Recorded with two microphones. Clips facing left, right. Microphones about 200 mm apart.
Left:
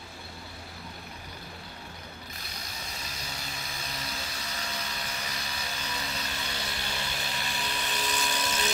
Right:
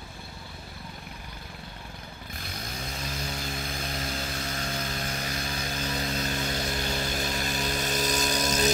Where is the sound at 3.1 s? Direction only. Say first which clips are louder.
Right 7 dB; 50° right (ahead or behind).